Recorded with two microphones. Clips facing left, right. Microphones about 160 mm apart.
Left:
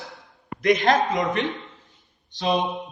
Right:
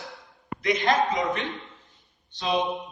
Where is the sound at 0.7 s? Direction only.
50° left (ahead or behind).